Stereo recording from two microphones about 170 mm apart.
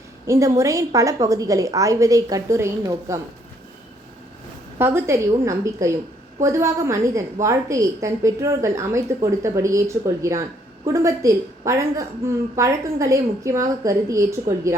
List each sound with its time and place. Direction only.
0.3 s a woman's voice: 15° right (ahead or behind)
4.8 s a woman's voice: 15° right (ahead or behind)